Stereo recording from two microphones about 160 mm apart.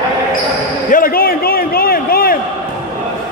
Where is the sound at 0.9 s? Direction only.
65° left (ahead or behind).